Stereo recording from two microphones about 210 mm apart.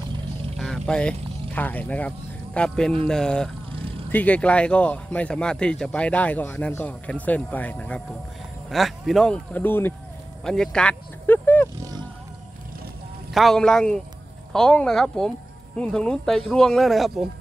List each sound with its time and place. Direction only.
0.6 s speech: centre (ahead or behind)
3.7 s vehicle: 25° right (ahead or behind)
4.1 s speech: 5° left (ahead or behind)
11.8 s roaring cats: 20° right (ahead or behind)
13.3 s speech: centre (ahead or behind)